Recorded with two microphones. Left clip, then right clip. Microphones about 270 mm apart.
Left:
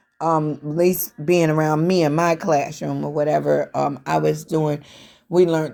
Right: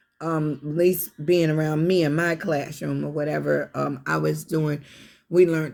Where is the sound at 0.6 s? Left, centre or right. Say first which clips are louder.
Left 3 dB; left.